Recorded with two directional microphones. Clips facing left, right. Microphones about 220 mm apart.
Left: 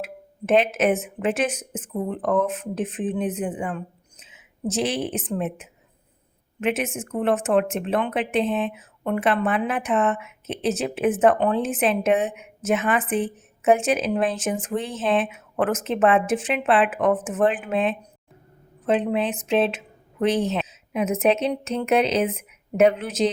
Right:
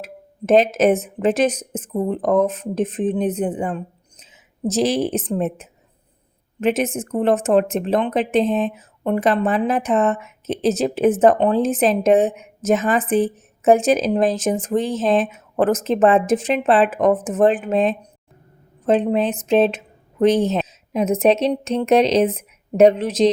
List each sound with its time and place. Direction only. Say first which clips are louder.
0.0 s a woman's voice: right 1 dB; 40° right (ahead or behind)